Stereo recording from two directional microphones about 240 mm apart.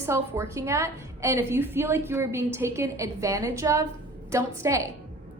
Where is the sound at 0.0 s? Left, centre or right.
Centre.